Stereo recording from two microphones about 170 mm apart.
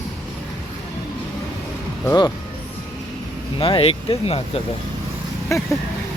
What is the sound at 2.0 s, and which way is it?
Speech, 20° left (ahead or behind).